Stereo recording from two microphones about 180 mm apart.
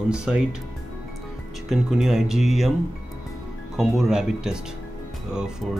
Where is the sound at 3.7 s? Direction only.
5° right (ahead or behind).